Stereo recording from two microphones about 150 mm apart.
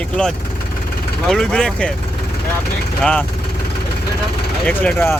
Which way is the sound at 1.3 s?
5° left (ahead or behind).